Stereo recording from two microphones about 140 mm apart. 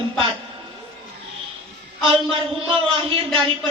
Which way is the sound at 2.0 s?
40° right (ahead or behind).